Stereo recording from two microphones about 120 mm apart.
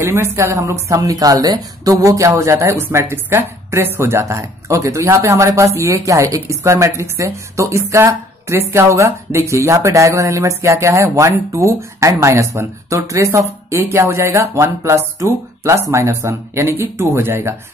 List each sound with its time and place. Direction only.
0.0 s speech: 20° right (ahead or behind)